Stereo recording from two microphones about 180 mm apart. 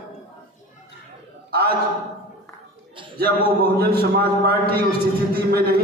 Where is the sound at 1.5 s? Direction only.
60° right (ahead or behind).